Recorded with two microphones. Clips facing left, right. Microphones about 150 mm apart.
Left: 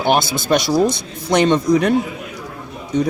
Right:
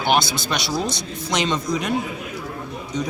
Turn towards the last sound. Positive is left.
turn(degrees=60)  # may be behind; listen again after turning